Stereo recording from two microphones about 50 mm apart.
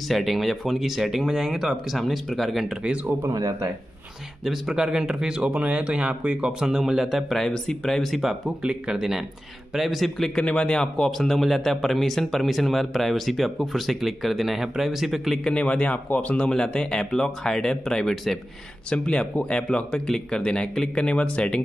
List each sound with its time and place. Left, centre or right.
0.1 s speech: centre
3.2 s speech: right
4.5 s speech: centre
5.6 s speech: right; by 8.0 s centre
8.0 s speech: centre
10.4 s a man's voice: left
10.8 s speech: centre
15.5 s speech: left; by 18.4 s centre
18.9 s a man's voice: centre